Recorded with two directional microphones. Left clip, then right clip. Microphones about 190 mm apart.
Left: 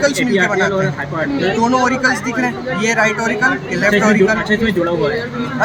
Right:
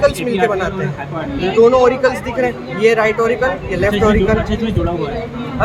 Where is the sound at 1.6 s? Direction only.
35° right (ahead or behind).